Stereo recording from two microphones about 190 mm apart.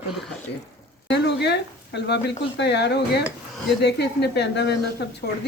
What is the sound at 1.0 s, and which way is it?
A woman's voice, 65° left (ahead or behind).